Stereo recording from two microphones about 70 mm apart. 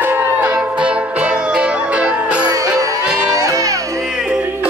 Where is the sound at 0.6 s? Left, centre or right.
Centre.